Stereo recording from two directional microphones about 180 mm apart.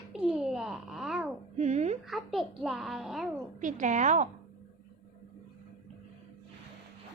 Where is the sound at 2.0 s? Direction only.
Centre (ahead or behind).